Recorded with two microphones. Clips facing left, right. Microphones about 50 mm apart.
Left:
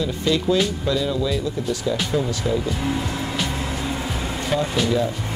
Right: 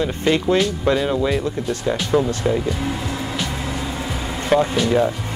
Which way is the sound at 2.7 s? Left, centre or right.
Centre.